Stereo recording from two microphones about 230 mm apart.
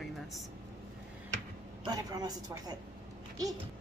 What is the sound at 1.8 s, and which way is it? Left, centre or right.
Speech, centre.